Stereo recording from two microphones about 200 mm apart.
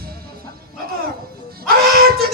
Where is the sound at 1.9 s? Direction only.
50° right (ahead or behind).